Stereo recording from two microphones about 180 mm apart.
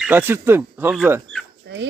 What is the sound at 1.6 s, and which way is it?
Dog, 80° right.